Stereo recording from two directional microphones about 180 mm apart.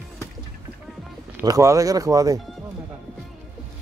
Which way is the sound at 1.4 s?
15° right (ahead or behind).